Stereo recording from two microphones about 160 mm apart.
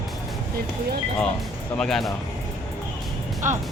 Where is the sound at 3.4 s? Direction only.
50° right (ahead or behind).